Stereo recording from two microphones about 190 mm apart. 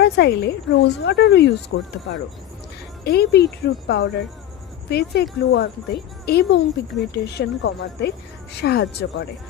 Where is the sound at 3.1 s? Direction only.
60° left (ahead or behind).